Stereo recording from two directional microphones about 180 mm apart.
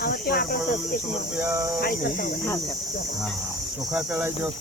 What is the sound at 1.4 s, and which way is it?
Speech, 15° right (ahead or behind).